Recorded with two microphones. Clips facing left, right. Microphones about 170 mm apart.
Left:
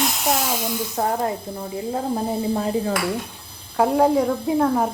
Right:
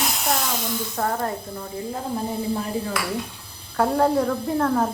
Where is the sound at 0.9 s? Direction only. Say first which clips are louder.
Left 3 dB; 20° left (ahead or behind).